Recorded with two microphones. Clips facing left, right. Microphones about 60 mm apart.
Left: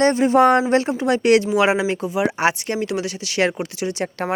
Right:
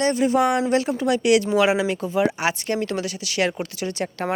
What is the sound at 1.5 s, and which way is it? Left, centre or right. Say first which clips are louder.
Speech: left 1 dB; left.